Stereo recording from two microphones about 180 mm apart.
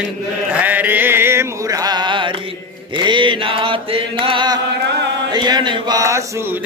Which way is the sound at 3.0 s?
25° right (ahead or behind).